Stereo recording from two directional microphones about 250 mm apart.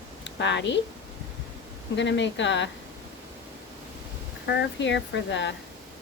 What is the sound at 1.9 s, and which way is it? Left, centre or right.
Speech, left.